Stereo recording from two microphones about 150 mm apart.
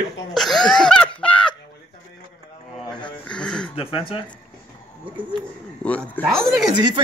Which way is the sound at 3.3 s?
5° left (ahead or behind).